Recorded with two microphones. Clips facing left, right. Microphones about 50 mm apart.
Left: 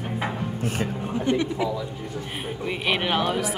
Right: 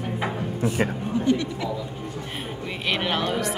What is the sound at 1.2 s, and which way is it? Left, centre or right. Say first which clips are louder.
Speech: even; left.